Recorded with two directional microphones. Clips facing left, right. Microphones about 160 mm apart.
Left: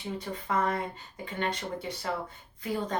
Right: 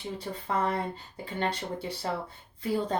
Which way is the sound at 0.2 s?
30° right (ahead or behind).